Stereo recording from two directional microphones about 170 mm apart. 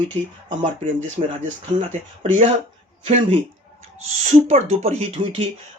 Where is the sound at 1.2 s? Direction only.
35° right (ahead or behind).